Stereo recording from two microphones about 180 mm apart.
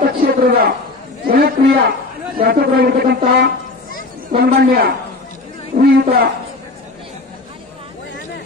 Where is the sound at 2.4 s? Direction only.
60° right (ahead or behind).